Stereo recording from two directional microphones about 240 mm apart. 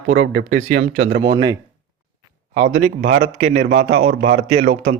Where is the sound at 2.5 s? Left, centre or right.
Right.